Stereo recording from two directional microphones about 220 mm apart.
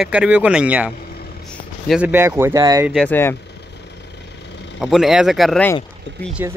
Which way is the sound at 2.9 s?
5° left (ahead or behind).